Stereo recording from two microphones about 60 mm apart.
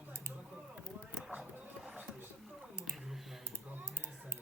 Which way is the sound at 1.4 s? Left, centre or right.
Centre.